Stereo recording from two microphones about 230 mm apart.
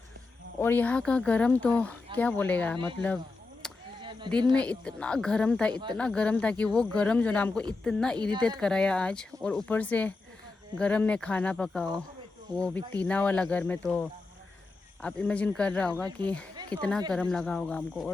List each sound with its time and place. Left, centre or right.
0.6 s speech: centre
3.6 s chop: centre
4.0 s a sound: right
4.5 s speech: centre
16.6 s a sound: centre
17.1 s speech: centre